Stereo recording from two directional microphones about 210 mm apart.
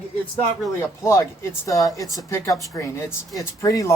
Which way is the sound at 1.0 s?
15° left (ahead or behind).